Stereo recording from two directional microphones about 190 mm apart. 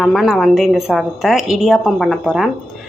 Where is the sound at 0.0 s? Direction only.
Centre (ahead or behind).